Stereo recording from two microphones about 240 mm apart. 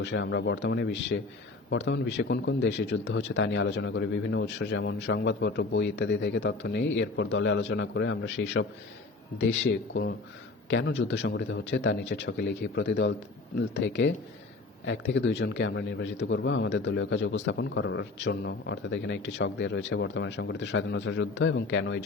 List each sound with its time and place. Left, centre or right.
0.0 s a man's voice: left